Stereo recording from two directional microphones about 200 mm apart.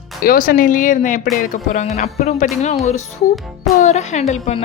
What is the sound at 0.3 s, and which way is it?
Speech, 45° left (ahead or behind).